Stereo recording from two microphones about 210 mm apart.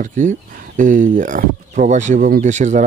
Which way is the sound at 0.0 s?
35° right (ahead or behind).